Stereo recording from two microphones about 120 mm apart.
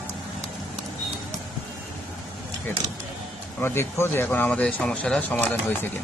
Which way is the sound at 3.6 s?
20° left (ahead or behind).